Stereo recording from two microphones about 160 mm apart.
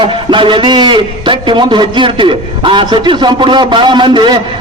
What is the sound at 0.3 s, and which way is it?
A man's voice, 30° right (ahead or behind).